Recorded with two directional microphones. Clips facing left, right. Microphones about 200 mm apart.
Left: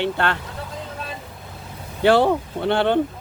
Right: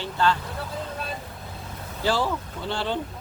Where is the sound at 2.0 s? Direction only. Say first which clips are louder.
Left 9 dB; 65° left (ahead or behind).